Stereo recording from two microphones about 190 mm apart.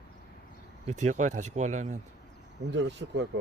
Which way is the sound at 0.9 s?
40° right (ahead or behind).